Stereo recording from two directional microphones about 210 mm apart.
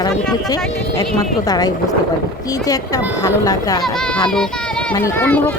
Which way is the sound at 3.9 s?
5° left (ahead or behind).